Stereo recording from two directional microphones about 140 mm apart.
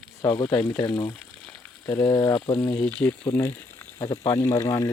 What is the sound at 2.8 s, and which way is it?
Speech, 10° left (ahead or behind).